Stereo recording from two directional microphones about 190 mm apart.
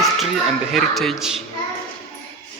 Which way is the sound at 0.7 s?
Centre (ahead or behind).